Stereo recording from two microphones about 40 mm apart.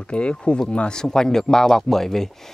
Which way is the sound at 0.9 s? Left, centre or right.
Centre.